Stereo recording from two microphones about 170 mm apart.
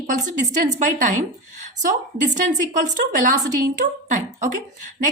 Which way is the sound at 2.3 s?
45° right (ahead or behind).